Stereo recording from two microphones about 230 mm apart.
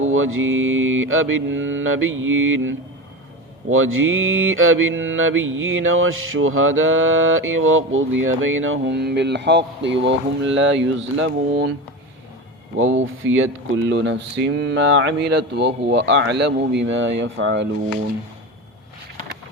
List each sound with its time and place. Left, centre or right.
0.0 s mantra: right
12.7 s mantra: right
13.2 s speech: right